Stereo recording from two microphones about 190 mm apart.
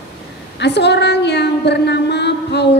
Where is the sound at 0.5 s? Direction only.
65° left (ahead or behind).